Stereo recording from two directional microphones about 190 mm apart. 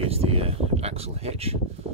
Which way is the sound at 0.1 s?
30° right (ahead or behind).